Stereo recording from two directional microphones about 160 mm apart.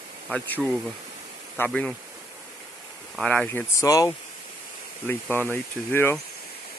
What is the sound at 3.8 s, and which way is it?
Speech, 20° left (ahead or behind).